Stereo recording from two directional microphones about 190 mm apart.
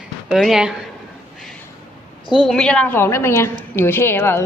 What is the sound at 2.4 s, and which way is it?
A woman's voice, 5° left (ahead or behind).